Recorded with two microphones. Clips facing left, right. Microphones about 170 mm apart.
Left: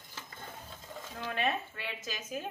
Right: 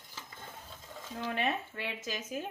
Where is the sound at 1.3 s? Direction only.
20° right (ahead or behind).